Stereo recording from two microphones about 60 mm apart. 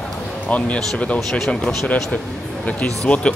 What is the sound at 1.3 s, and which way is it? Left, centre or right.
Speech, centre.